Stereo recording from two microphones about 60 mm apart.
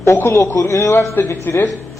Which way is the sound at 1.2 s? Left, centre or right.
Left.